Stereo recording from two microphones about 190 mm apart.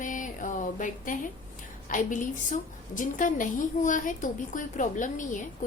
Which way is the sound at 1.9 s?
45° left (ahead or behind).